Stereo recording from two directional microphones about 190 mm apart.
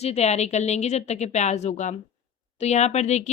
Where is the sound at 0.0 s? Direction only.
35° left (ahead or behind).